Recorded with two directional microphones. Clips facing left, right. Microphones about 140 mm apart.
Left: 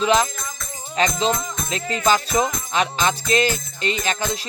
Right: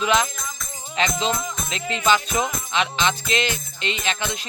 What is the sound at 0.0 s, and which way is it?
Music, 30° left (ahead or behind).